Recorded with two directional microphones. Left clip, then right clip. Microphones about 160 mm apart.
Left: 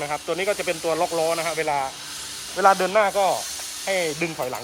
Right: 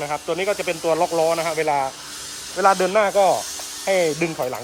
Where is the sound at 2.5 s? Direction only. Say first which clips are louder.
Even; 5° right (ahead or behind).